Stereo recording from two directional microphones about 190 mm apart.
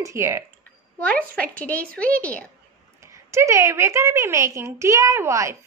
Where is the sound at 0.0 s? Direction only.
15° right (ahead or behind).